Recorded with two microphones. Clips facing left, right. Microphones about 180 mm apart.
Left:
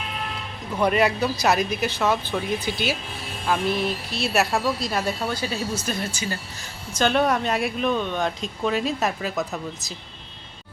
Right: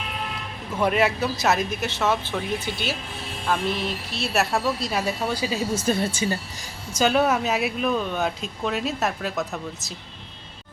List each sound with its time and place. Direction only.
0.8 s speech: centre (ahead or behind)
5.8 s speech: 25° right (ahead or behind)
6.9 s speech: 5° right (ahead or behind)